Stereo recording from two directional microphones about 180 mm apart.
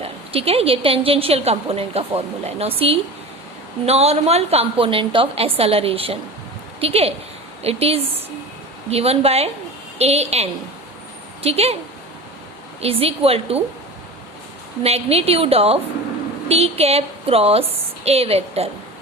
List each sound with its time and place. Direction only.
0.0 s a woman's voice: 35° right (ahead or behind)
12.8 s a woman's voice: 35° right (ahead or behind)
14.8 s a woman's voice: 35° right (ahead or behind)